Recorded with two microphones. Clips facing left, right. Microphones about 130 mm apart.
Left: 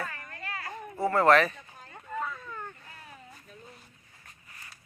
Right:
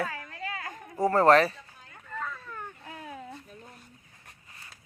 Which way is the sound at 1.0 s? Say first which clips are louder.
Right 2 dB; 40° right (ahead or behind).